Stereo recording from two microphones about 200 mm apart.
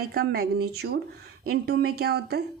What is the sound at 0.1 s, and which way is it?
Speech, 55° right (ahead or behind).